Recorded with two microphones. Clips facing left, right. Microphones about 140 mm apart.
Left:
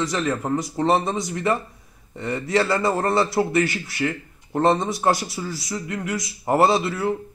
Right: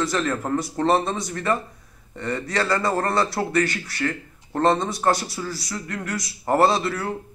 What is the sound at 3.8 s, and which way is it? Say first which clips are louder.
Speech: left 1 dB; 20° left (ahead or behind).